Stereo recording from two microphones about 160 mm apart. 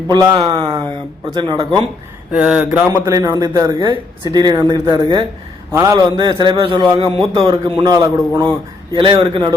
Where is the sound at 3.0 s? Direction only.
20° right (ahead or behind).